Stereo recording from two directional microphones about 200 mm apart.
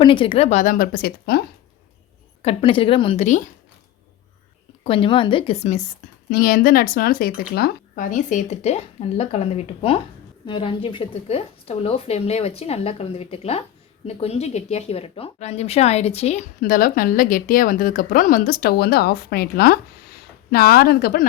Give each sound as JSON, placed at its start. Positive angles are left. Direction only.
{"t": 0.0, "sound": "speech", "side_deg": 25}
{"t": 2.4, "sound": "a woman's voice", "side_deg": 30}
{"t": 4.8, "sound": "a woman's voice", "side_deg": 25}
{"t": 6.3, "sound": "speech", "side_deg": 45}